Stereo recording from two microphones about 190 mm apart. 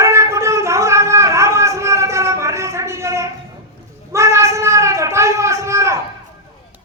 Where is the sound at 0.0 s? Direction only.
15° right (ahead or behind).